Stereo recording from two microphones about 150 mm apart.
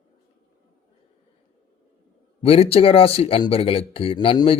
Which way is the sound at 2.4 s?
40° left (ahead or behind).